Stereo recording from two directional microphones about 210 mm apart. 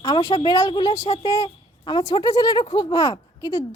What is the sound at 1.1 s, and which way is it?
Speech, 25° left (ahead or behind).